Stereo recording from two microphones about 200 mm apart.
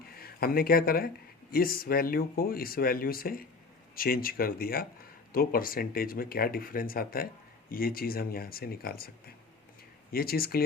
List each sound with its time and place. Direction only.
0.2 s speech: 50° left (ahead or behind)